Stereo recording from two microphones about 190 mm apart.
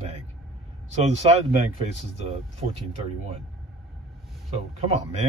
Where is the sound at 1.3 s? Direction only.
30° right (ahead or behind).